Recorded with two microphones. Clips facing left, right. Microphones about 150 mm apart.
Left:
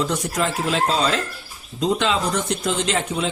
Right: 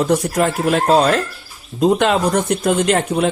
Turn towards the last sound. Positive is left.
turn(degrees=-55)  # may be behind; listen again after turning